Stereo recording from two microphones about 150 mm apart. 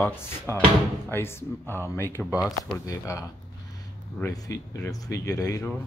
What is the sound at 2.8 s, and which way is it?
Speech, 25° left (ahead or behind).